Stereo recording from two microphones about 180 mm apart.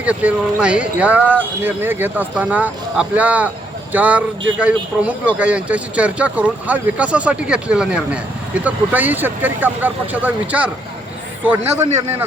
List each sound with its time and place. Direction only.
0.0 s speech: 5° right (ahead or behind)
11.8 s a man's voice: 40° right (ahead or behind)